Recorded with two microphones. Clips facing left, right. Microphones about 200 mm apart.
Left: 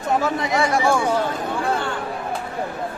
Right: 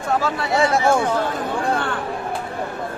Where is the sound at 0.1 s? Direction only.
20° left (ahead or behind).